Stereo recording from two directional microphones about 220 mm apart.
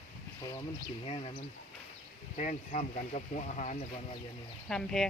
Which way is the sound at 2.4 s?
35° left (ahead or behind).